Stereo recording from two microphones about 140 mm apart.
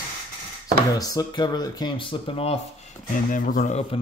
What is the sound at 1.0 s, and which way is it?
Speech, 25° left (ahead or behind).